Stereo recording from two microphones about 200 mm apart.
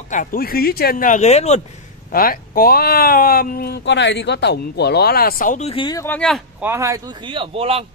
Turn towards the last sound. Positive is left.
turn(degrees=-30)  # may be behind; listen again after turning